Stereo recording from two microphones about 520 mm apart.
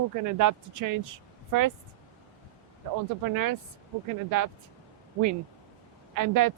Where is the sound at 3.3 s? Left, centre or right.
Right.